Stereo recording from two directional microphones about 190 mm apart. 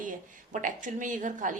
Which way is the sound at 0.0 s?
45° right (ahead or behind).